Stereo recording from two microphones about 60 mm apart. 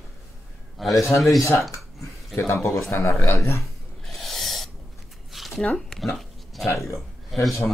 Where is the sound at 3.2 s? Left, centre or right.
Left.